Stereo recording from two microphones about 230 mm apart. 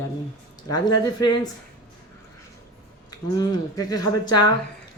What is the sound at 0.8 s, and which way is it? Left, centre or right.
Speech, centre.